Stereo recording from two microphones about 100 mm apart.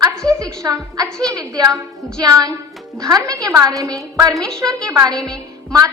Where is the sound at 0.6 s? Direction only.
40° right (ahead or behind).